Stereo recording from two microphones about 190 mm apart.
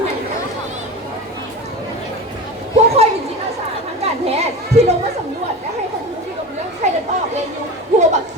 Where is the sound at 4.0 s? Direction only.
35° right (ahead or behind).